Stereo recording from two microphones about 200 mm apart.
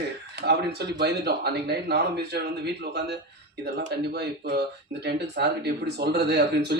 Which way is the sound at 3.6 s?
55° right (ahead or behind).